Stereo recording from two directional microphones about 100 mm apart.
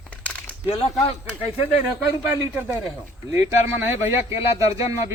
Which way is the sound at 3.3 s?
25° right (ahead or behind).